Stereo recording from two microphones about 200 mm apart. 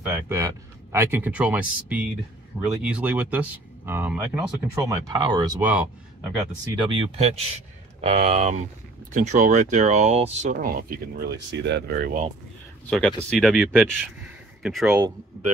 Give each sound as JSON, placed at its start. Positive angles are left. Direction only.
{"t": 0.3, "sound": "speech", "side_deg": -15}
{"t": 4.8, "sound": "speech", "side_deg": -20}
{"t": 6.9, "sound": "speech", "side_deg": -30}
{"t": 13.3, "sound": "speech", "side_deg": 0}